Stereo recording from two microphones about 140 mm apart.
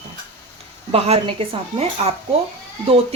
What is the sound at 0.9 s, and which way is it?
Speech, 40° right (ahead or behind).